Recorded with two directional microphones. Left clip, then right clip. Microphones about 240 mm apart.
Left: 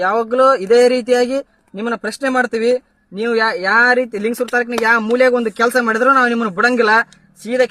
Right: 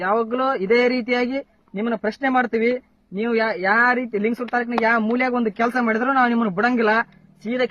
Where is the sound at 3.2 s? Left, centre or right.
Centre.